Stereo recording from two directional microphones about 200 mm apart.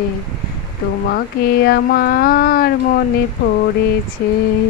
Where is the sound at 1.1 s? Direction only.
50° left (ahead or behind).